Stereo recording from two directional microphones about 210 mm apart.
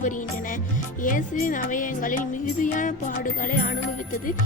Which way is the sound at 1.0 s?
40° left (ahead or behind).